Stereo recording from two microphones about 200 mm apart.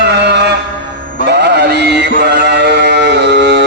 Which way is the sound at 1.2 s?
60° right (ahead or behind).